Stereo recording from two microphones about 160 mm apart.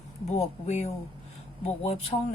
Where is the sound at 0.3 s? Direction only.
45° left (ahead or behind).